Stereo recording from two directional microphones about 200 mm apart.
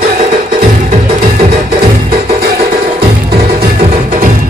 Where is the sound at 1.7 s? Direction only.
55° right (ahead or behind).